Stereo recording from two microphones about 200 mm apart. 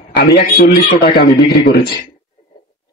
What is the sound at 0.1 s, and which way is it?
A man's voice, 55° left (ahead or behind).